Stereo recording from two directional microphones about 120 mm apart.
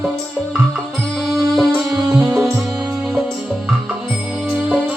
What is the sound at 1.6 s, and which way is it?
Music, centre (ahead or behind).